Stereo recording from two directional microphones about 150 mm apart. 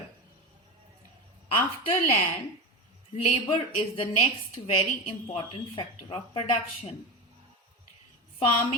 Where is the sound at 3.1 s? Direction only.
40° left (ahead or behind).